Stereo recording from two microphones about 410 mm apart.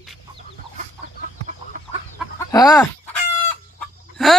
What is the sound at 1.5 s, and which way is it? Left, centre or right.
Chicken, centre.